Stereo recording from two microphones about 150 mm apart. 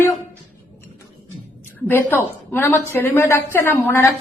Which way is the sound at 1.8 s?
10° left (ahead or behind).